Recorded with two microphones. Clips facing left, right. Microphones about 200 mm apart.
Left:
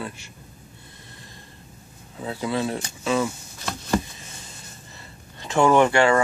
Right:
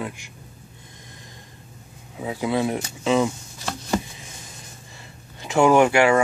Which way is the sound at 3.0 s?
15° right (ahead or behind).